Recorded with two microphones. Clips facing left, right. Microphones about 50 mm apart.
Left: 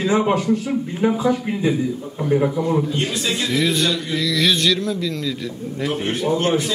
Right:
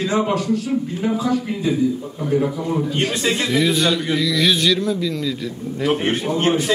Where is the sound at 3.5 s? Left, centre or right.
Centre.